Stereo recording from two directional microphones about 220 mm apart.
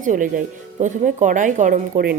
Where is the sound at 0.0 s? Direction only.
35° right (ahead or behind).